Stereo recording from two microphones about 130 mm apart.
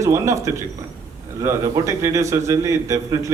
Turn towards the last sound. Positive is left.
turn(degrees=-25)  # may be behind; listen again after turning